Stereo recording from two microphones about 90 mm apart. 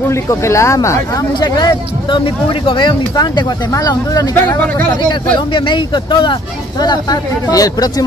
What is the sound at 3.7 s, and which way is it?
Speech, 40° left (ahead or behind).